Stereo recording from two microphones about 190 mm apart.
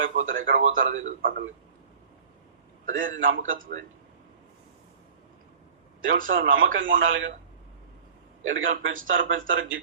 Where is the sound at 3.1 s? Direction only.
80° right.